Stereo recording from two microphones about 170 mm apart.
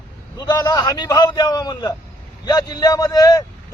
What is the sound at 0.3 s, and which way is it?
A man's voice, 20° left (ahead or behind).